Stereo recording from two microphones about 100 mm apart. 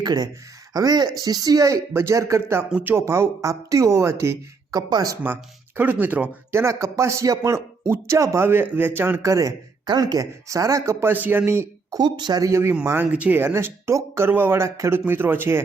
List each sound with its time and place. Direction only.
0.0 s speech: 40° right (ahead or behind)
4.9 s speech: 40° right (ahead or behind)
5.2 s speech: 20° right (ahead or behind)
6.5 s speech: 25° right (ahead or behind)
9.8 s speech: 45° right (ahead or behind)
11.1 s speech: 20° right (ahead or behind)
11.9 s speech: 45° right (ahead or behind)
12.5 s speech: 25° right (ahead or behind)
13.1 s speech: 15° right (ahead or behind)